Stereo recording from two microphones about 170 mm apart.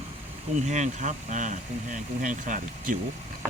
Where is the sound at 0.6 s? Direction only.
45° right (ahead or behind).